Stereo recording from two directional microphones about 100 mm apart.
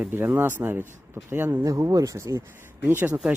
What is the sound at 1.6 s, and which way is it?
Speech, 35° right (ahead or behind).